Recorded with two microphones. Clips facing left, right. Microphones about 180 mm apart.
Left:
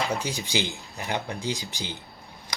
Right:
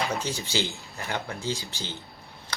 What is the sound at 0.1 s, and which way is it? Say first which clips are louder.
Speech: left 1 dB; 15° left (ahead or behind).